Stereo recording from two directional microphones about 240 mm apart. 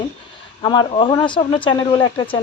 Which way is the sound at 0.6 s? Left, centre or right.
Centre.